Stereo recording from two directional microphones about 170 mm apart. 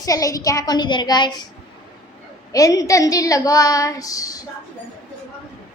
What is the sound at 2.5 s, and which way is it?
A woman's voice, 20° left (ahead or behind).